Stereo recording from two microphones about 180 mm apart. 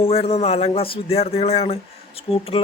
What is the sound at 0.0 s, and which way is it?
A man's voice, 35° left (ahead or behind).